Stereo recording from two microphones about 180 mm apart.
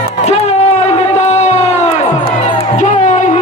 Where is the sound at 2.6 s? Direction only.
40° left (ahead or behind).